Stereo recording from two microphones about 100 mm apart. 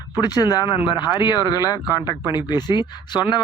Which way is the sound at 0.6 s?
50° left (ahead or behind).